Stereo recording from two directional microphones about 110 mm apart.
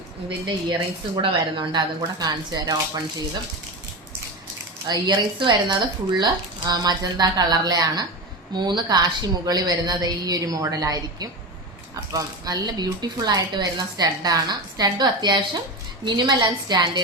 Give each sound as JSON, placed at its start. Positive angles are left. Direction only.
{"t": 0.7, "sound": "speech", "side_deg": -40}
{"t": 4.9, "sound": "a woman's voice", "side_deg": -40}